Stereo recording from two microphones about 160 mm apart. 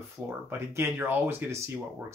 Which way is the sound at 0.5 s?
15° right (ahead or behind).